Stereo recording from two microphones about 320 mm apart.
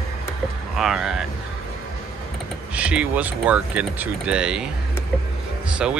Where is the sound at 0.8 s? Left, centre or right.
Centre.